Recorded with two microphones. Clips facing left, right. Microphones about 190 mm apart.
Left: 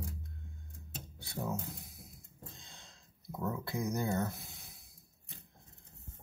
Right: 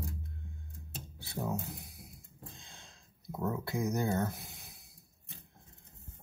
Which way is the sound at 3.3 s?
15° right (ahead or behind).